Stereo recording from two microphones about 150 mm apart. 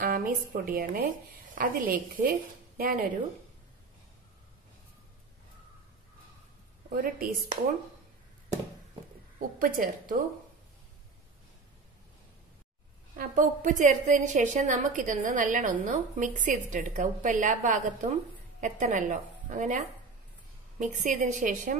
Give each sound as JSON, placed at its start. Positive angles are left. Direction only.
{"t": 0.0, "sound": "a woman's voice", "side_deg": -65}
{"t": 6.9, "sound": "a woman's voice", "side_deg": -75}
{"t": 9.6, "sound": "a woman's voice", "side_deg": -65}
{"t": 13.1, "sound": "a woman's voice", "side_deg": -60}